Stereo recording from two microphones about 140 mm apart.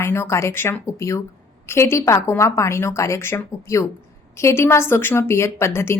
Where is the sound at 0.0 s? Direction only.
20° left (ahead or behind).